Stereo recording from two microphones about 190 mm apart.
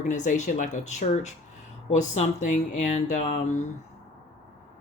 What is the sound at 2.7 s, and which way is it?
Speech, 40° left (ahead or behind).